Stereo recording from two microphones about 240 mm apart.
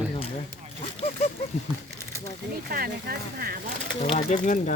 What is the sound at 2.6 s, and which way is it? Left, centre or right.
Speech, right.